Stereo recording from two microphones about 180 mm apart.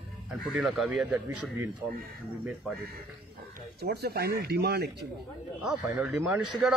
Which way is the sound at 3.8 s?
65° right (ahead or behind).